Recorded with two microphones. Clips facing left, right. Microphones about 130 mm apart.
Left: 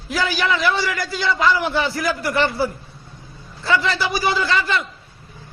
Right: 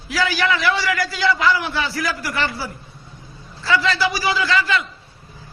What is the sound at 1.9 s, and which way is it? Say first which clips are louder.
A man's voice: left 3 dB; 50° left (ahead or behind).